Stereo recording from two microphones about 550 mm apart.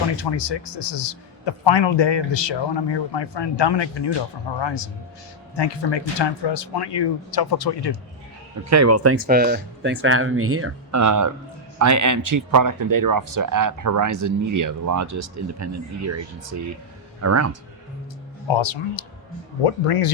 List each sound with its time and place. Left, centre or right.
0.2 s a man's voice: left
8.7 s speech: right
9.2 s speech: centre
18.4 s speech: left
19.6 s speech: left